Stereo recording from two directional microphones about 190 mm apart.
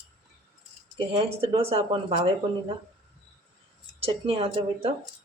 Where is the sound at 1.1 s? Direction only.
30° right (ahead or behind).